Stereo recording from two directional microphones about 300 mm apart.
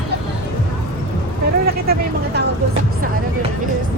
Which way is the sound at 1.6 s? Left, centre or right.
Right.